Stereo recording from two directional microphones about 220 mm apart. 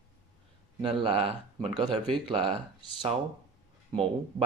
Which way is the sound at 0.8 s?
25° right (ahead or behind).